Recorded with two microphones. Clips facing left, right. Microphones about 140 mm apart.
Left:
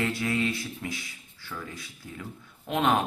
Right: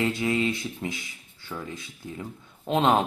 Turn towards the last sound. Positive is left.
turn(degrees=-25)  # may be behind; listen again after turning